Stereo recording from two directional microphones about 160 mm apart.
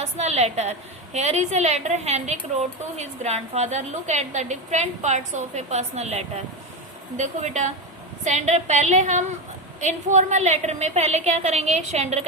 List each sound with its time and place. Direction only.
0.0 s a woman's voice: 40° right (ahead or behind)